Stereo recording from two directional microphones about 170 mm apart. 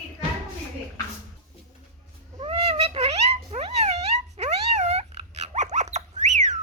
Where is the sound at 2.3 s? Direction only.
35° right (ahead or behind).